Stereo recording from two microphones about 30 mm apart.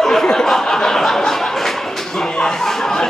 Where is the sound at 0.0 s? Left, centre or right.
Centre.